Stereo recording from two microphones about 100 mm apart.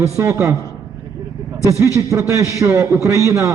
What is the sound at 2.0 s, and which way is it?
A man's voice, 30° right (ahead or behind).